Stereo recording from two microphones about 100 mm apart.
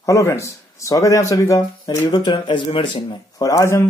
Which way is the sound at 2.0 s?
45° left (ahead or behind).